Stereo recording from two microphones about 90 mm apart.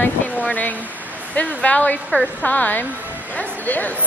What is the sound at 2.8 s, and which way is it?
Speech, 20° right (ahead or behind).